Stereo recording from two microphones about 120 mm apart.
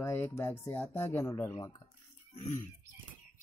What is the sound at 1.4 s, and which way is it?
Speech, 30° left (ahead or behind).